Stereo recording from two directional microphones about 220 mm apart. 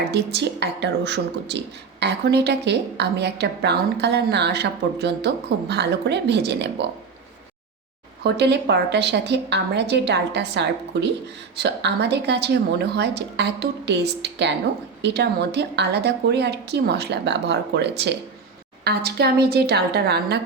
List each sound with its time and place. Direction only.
0.1 s a woman's voice: 50° right (ahead or behind)
8.2 s a woman's voice: 50° right (ahead or behind)